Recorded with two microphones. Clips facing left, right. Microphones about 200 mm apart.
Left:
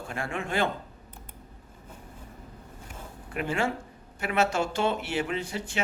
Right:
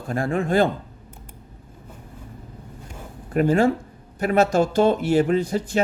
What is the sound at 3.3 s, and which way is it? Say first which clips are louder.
Speech: right 11 dB; 40° right (ahead or behind).